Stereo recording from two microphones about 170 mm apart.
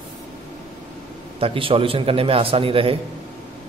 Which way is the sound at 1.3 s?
30° right (ahead or behind).